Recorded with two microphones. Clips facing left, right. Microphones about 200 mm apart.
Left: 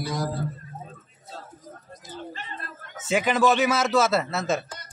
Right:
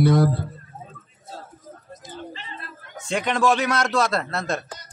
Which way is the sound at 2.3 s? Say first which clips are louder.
Even; 45° left (ahead or behind).